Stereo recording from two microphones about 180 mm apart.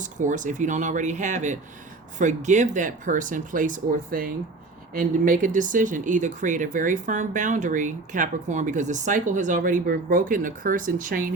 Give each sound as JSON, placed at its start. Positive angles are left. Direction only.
{"t": 0.0, "sound": "speech", "side_deg": -45}